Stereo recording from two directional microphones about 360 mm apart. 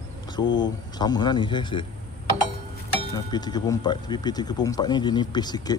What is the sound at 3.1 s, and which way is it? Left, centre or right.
Speech, centre.